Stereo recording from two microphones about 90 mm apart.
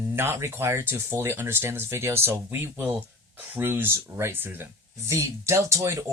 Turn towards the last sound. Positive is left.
turn(degrees=-30)  # may be behind; listen again after turning